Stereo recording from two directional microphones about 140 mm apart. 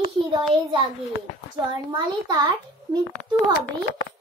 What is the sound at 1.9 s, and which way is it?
A child's voice, 30° right (ahead or behind).